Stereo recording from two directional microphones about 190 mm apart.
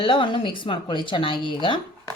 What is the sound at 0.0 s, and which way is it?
Speech, 25° left (ahead or behind).